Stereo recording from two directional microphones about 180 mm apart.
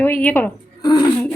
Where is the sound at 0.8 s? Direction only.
20° left (ahead or behind).